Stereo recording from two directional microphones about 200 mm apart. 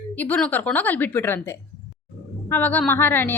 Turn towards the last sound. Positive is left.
turn(degrees=10)  # may be behind; listen again after turning